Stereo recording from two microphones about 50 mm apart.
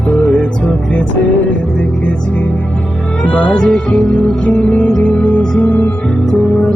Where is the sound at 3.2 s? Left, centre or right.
Left.